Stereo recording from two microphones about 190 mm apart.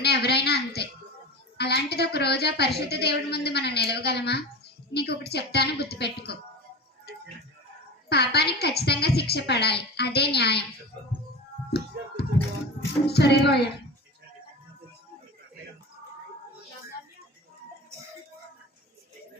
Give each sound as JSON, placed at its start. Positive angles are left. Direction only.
{"t": 0.0, "sound": "a sound", "side_deg": 60}
{"t": 1.5, "sound": "a woman's voice", "side_deg": 60}
{"t": 8.1, "sound": "a woman's voice", "side_deg": 60}
{"t": 12.2, "sound": "music", "side_deg": 60}
{"t": 13.1, "sound": "a woman's voice", "side_deg": 60}